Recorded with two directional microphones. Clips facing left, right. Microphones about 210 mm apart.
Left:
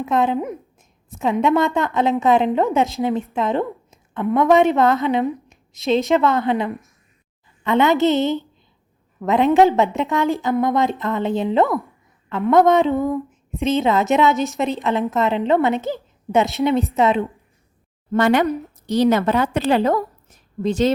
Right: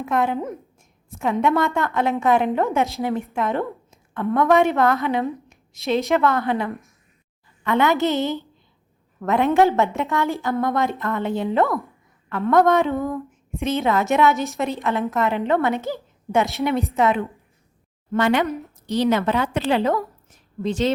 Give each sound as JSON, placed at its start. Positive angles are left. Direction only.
{"t": 0.0, "sound": "a woman's voice", "side_deg": 20}
{"t": 18.1, "sound": "a woman's voice", "side_deg": 45}